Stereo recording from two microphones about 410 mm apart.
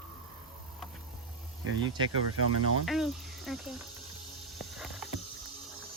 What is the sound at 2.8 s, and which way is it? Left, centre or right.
Speech, centre.